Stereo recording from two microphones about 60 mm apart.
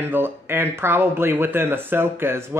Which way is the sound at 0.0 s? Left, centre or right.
Right.